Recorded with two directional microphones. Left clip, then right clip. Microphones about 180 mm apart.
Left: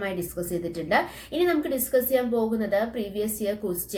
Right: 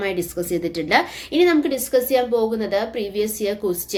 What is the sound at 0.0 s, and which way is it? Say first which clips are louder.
A woman's voice: right 6 dB; 20° right (ahead or behind).